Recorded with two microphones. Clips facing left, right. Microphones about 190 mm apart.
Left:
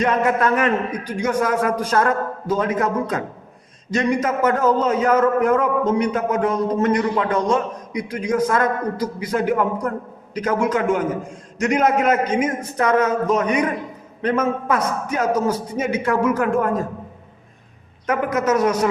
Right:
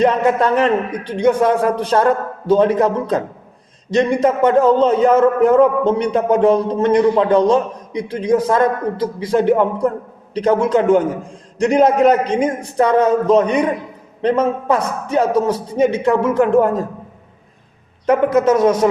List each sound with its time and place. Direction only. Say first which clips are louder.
0.3 s a man's voice: right 4 dB; 30° right (ahead or behind)
18.0 s a man's voice: right 7 dB; 30° right (ahead or behind)